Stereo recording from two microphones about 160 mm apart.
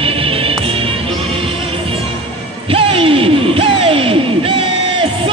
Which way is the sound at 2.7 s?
35° right (ahead or behind).